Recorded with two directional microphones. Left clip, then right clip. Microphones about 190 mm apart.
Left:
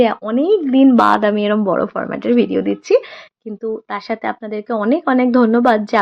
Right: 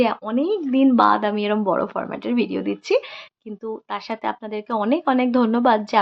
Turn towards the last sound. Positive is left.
turn(degrees=20)  # may be behind; listen again after turning